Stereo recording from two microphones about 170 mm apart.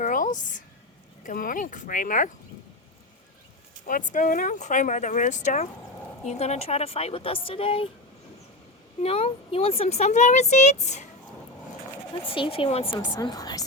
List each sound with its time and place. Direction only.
0.0 s a sound: 50° left (ahead or behind)
1.2 s speech: 55° left (ahead or behind)
3.8 s speech: 50° left (ahead or behind); by 7.9 s 30° left (ahead or behind)
9.0 s speech: 35° left (ahead or behind)
12.3 s a woman's voice: 30° left (ahead or behind)